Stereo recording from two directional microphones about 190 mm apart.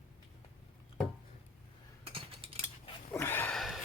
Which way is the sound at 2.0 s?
30° right (ahead or behind).